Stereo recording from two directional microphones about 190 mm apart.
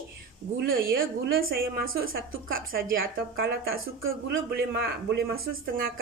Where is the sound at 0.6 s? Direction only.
50° right (ahead or behind).